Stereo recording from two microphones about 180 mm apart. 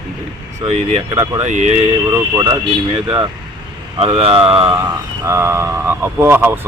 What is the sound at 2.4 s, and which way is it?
Speech, 25° right (ahead or behind).